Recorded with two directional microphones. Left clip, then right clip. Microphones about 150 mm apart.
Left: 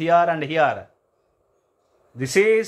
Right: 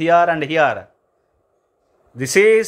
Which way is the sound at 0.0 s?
30° right (ahead or behind).